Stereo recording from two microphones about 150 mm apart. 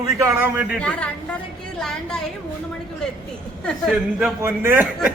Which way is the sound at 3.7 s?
Centre (ahead or behind).